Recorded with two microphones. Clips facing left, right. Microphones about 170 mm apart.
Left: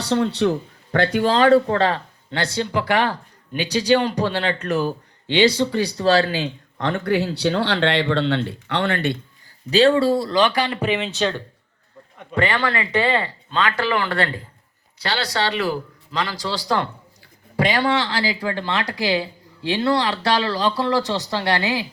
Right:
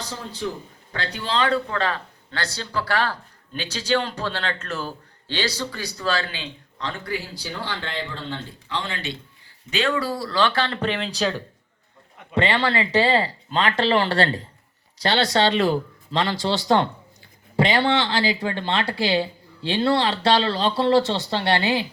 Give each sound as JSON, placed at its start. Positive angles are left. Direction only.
{"t": 0.0, "sound": "speech", "side_deg": 75}
{"t": 9.6, "sound": "speech", "side_deg": 35}
{"t": 12.3, "sound": "speech", "side_deg": -25}